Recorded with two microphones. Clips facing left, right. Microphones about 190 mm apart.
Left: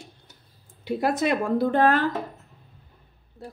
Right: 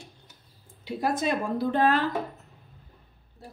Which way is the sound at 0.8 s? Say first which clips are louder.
Left 3 dB; 65° left (ahead or behind).